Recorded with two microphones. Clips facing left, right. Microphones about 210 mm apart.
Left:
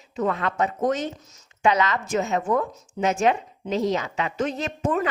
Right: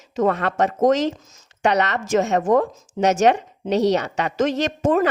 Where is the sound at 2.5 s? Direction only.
90° right.